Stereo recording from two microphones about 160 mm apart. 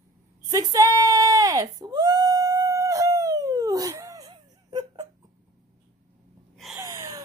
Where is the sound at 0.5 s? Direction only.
20° right (ahead or behind).